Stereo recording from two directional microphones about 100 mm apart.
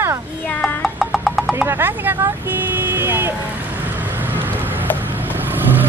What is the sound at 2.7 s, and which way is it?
Vehicle, 20° right (ahead or behind).